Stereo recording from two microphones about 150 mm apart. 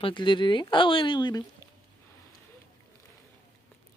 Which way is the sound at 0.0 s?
30° left (ahead or behind).